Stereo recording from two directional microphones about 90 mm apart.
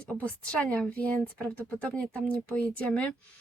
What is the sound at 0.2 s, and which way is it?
A woman's voice, 15° left (ahead or behind).